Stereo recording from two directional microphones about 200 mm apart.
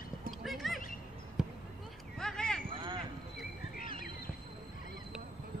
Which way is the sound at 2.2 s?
5° left (ahead or behind).